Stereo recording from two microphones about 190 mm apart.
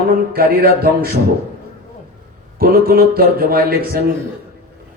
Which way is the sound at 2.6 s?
50° right (ahead or behind).